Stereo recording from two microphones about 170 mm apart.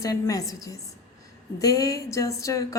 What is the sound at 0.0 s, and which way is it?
A woman's voice, 20° left (ahead or behind).